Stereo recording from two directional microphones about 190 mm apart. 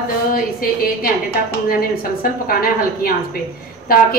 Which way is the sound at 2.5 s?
50° left (ahead or behind).